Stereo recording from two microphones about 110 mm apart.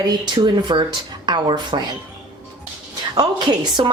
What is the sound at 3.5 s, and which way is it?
Speech, 45° right (ahead or behind).